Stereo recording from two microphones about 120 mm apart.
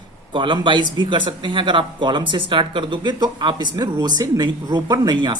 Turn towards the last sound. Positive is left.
turn(degrees=-40)  # may be behind; listen again after turning